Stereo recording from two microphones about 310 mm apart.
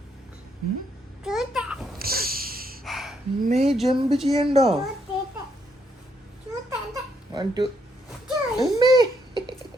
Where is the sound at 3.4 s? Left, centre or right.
Right.